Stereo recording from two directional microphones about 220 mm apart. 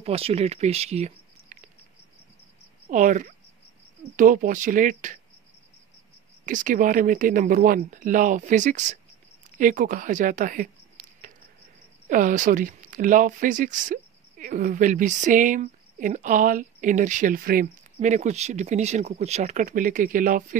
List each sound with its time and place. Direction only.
0.0 s speech: 25° right (ahead or behind)
2.9 s speech: 35° right (ahead or behind)
6.4 s speech: 35° right (ahead or behind)